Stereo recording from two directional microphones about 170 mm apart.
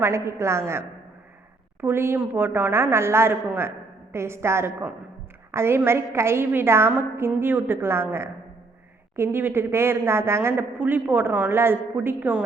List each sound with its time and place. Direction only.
0.0 s a woman's voice: 15° right (ahead or behind)
9.1 s a woman's voice: 15° right (ahead or behind)